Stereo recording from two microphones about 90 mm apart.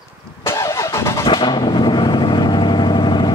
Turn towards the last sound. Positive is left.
turn(degrees=60)  # may be behind; listen again after turning